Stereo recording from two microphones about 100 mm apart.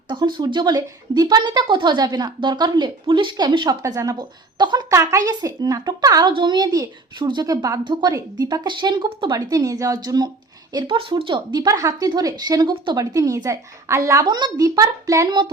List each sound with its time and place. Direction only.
0.1 s a woman's voice: 50° right (ahead or behind)
1.4 s a woman's voice: 55° right (ahead or behind)
4.9 s a woman's voice: 30° right (ahead or behind)
5.3 s a woman's voice: 40° right (ahead or behind)
7.4 s a woman's voice: 35° right (ahead or behind); by 9.4 s 55° right (ahead or behind)
9.5 s speech: 40° right (ahead or behind)
10.8 s a woman's voice: 60° right (ahead or behind)
13.0 s a woman's voice: 40° right (ahead or behind)
14.3 s a woman's voice: 50° right (ahead or behind)
14.8 s a woman's voice: 35° right (ahead or behind)